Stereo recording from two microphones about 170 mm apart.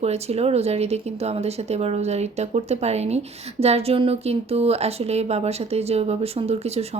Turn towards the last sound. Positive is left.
turn(degrees=-35)  # may be behind; listen again after turning